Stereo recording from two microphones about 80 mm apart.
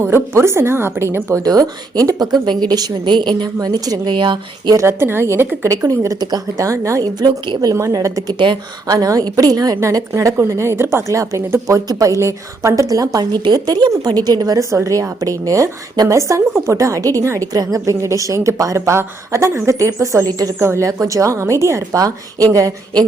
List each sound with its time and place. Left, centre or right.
0.0 s a woman's voice: right
1.4 s speech: right
3.0 s a woman's voice: right
4.1 s speech: right
4.9 s a woman's voice: right
5.6 s a woman's voice: right
7.2 s a woman's voice: right
7.6 s a woman's voice: right
13.1 s a woman's voice: right
17.5 s a woman's voice: right